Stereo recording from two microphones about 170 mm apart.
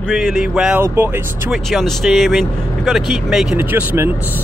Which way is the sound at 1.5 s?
Centre (ahead or behind).